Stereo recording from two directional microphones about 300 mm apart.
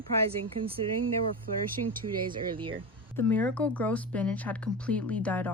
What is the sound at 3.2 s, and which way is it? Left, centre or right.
A woman's voice, centre.